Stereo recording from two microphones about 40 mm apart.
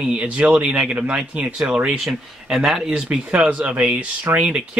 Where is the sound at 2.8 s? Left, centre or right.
Right.